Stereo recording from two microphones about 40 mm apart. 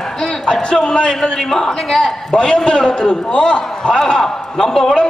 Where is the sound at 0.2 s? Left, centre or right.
Centre.